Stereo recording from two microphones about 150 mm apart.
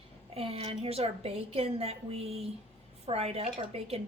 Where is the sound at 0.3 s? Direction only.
40° right (ahead or behind).